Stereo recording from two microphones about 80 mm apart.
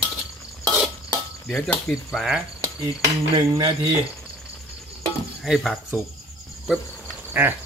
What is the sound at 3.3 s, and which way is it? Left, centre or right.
Cutlery, right.